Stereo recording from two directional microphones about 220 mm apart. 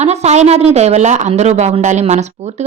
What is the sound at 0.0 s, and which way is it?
A woman's voice, 30° right (ahead or behind).